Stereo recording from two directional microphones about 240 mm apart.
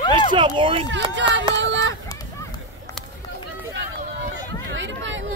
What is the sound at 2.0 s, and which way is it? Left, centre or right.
Run, centre.